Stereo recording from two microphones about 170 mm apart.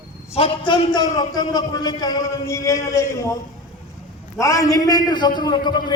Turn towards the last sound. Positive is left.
turn(degrees=25)  # may be behind; listen again after turning